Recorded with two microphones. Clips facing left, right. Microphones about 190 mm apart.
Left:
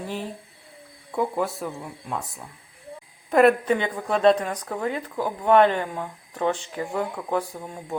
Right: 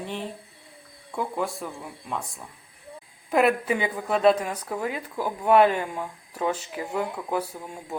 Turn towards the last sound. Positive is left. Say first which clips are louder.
# left 2 dB
turn(degrees=-5)  # may be behind; listen again after turning